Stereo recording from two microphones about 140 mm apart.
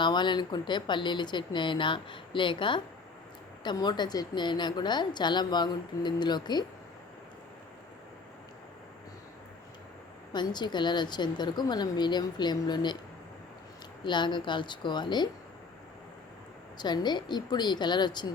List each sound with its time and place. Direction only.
0.0 s a woman's voice: 35° left (ahead or behind)
10.3 s a woman's voice: 30° left (ahead or behind)
14.0 s a woman's voice: 35° left (ahead or behind)
16.7 s a woman's voice: 30° left (ahead or behind)